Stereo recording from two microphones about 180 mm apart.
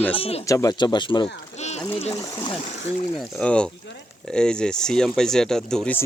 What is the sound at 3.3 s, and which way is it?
Speech, 5° left (ahead or behind).